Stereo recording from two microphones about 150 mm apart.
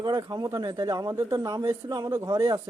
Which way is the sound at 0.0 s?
30° right (ahead or behind).